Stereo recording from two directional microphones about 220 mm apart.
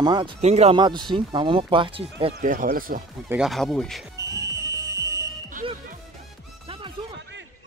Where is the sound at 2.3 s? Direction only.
40° right (ahead or behind).